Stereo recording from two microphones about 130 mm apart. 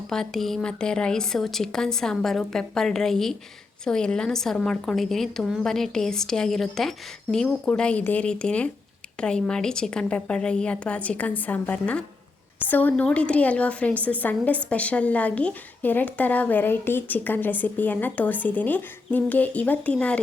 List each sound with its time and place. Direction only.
0.1 s a woman's voice: 5° left (ahead or behind)